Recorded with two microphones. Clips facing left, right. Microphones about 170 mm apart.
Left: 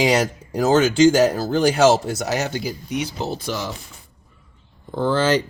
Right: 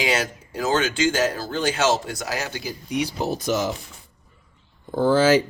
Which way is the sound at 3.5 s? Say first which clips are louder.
Right 4 dB; 20° right (ahead or behind).